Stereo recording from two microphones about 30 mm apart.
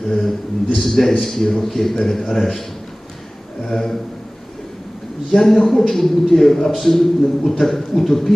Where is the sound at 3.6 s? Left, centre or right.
Centre.